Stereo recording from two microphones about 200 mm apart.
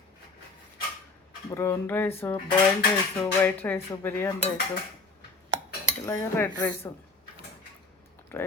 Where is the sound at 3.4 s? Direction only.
10° left (ahead or behind).